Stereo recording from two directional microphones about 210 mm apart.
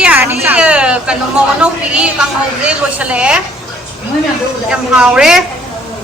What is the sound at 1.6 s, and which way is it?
A woman's voice, 5° right (ahead or behind).